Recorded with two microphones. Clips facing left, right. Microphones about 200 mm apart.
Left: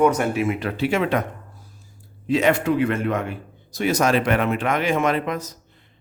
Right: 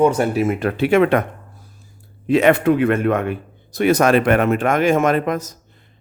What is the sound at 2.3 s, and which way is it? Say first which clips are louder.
Speech: right 5 dB; 60° right (ahead or behind).